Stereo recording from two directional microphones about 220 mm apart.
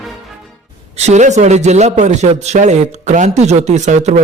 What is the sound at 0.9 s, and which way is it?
A man's voice, 30° right (ahead or behind).